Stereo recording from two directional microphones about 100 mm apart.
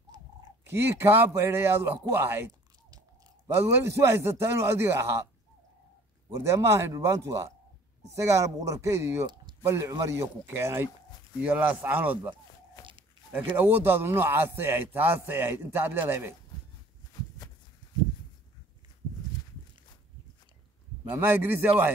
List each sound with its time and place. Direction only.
0.1 s cat: 40° right (ahead or behind)
0.7 s a man's voice: 25° right (ahead or behind)
3.5 s a man's voice: 30° right (ahead or behind)
6.4 s speech: 30° right (ahead or behind)
9.2 s a sound: 45° right (ahead or behind)
9.7 s a man's voice: 35° right (ahead or behind); by 12.4 s 15° right (ahead or behind)
13.6 s a man's voice: 20° right (ahead or behind)
17.2 s a sound: 40° left (ahead or behind)
21.0 s a man's voice: 25° right (ahead or behind)